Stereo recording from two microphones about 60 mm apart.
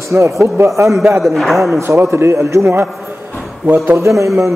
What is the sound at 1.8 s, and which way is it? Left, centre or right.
A man's voice, right.